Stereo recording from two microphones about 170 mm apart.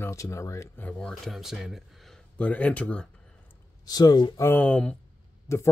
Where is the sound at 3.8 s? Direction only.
20° left (ahead or behind).